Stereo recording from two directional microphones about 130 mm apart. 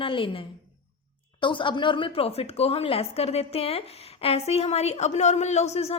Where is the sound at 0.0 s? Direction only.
40° left (ahead or behind).